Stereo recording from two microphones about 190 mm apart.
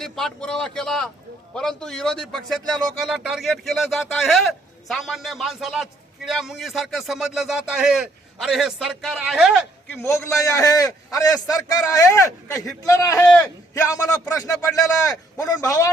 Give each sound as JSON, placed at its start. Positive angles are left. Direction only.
{"t": 0.0, "sound": "a man's voice", "side_deg": 0}
{"t": 9.9, "sound": "a man's voice", "side_deg": 15}